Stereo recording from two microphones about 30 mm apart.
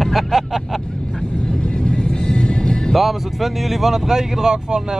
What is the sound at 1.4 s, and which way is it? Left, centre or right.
Music, left.